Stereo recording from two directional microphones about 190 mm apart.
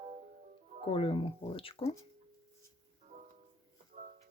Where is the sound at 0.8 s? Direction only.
30° left (ahead or behind).